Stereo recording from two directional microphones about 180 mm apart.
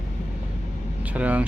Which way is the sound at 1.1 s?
10° right (ahead or behind).